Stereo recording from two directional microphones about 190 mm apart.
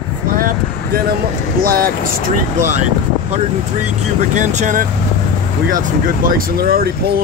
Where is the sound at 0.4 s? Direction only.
50° right (ahead or behind).